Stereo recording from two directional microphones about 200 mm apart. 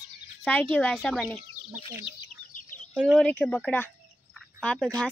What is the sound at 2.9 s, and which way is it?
Speech, centre (ahead or behind).